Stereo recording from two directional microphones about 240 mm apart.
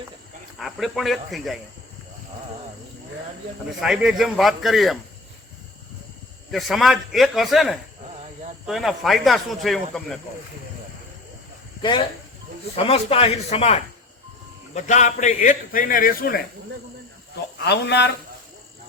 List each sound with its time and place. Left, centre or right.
0.6 s speech: centre
3.8 s speech: centre
6.5 s speech: centre
11.8 s a man's voice: centre
14.8 s a man's voice: left
17.7 s speech: left